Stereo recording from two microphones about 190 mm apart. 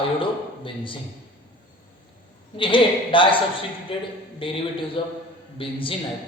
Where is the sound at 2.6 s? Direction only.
25° left (ahead or behind).